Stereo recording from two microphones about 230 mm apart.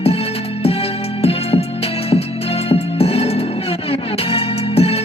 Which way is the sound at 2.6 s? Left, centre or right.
Left.